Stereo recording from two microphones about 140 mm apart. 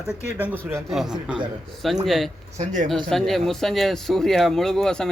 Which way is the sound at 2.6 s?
60° right (ahead or behind).